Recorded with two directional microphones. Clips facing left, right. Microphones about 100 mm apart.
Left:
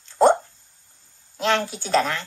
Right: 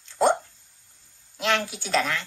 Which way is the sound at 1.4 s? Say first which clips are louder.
Left 3 dB; 35° left (ahead or behind).